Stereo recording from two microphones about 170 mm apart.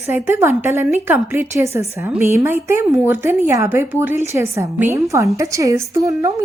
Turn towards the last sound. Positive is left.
turn(degrees=-20)  # may be behind; listen again after turning